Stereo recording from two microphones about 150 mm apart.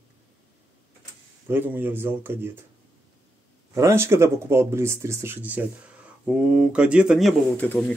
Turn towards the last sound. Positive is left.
turn(degrees=10)  # may be behind; listen again after turning